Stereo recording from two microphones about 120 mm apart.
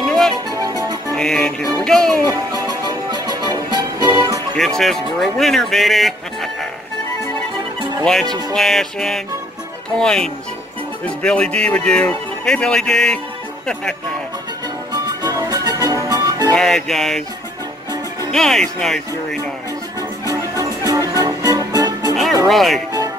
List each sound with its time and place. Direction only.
0.0 s music: centre (ahead or behind)
0.5 s music: 30° right (ahead or behind)
1.1 s music: 5° left (ahead or behind)
1.8 s speech: 5° left (ahead or behind)
2.2 s music: 35° right (ahead or behind)
4.6 s speech: 5° left (ahead or behind)
8.0 s speech: 5° left (ahead or behind)
11.1 s music: 10° left (ahead or behind)
14.9 s music: 30° right (ahead or behind)
16.5 s speech: 5° left (ahead or behind)
18.3 s speech: 5° left (ahead or behind)
20.2 s music: 30° right (ahead or behind)
22.1 s music: centre (ahead or behind)
22.5 s speech: centre (ahead or behind)